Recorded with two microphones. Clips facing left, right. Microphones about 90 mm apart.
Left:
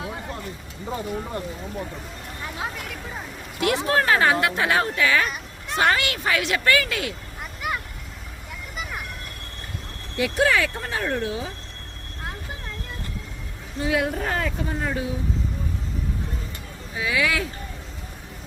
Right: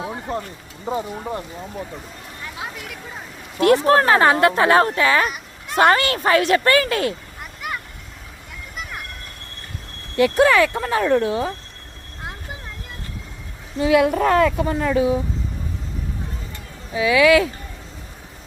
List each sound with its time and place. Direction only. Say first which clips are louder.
0.0 s a sound: right 6 dB; 30° right (ahead or behind)
0.9 s speech: right 6 dB; 25° right (ahead or behind)
2.6 s vehicle: left 1 dB; centre (ahead or behind)
3.6 s speech: right 7 dB; 40° right (ahead or behind)
5.3 s a sound: right 2 dB; 5° right (ahead or behind)
5.8 s speech: right 6 dB; 40° right (ahead or behind)
7.6 s vehicle: left 1 dB; centre (ahead or behind)
10.2 s speech: right 6 dB; 55° right (ahead or behind)
13.8 s speech: right 8 dB; 85° right
16.9 s speech: right 10 dB; 90° right